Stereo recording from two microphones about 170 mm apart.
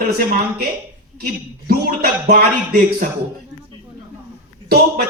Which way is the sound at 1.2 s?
60° right (ahead or behind).